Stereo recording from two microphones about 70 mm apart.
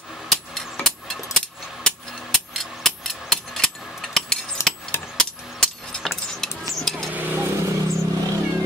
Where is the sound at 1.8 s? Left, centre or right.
Centre.